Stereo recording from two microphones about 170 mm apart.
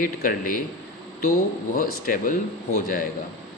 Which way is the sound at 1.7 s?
55° left (ahead or behind).